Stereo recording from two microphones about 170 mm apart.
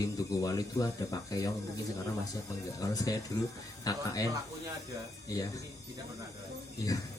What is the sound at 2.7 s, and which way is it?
A man's voice, 20° left (ahead or behind).